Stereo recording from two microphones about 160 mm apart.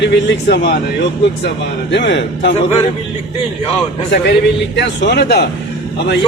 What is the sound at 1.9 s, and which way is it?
Speech, 90° left.